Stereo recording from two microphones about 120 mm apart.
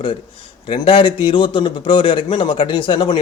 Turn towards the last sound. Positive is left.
turn(degrees=40)  # may be behind; listen again after turning